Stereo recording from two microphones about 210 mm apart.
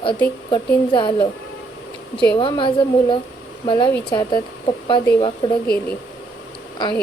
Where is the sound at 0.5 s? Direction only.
20° left (ahead or behind).